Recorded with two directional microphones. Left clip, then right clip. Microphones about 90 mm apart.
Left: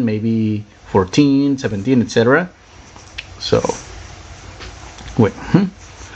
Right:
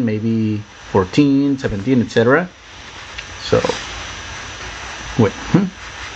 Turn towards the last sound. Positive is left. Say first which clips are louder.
# left 1 dB
turn(degrees=20)  # may be behind; listen again after turning